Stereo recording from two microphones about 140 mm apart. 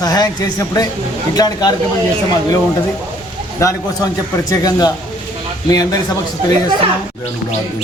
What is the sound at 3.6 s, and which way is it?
A man's voice, 25° left (ahead or behind).